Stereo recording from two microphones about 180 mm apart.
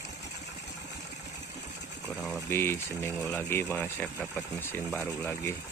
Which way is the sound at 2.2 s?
Centre (ahead or behind).